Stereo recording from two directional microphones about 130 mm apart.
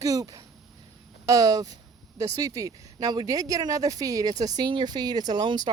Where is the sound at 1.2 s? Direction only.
25° right (ahead or behind).